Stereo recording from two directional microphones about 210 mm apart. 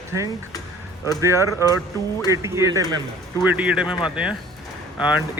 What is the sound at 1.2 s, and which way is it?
A man's voice, 15° right (ahead or behind).